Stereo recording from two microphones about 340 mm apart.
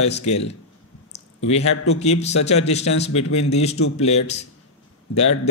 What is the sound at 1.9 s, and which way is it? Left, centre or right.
A man's voice, centre.